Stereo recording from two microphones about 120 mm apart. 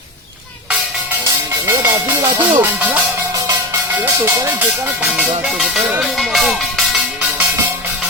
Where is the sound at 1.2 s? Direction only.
20° right (ahead or behind).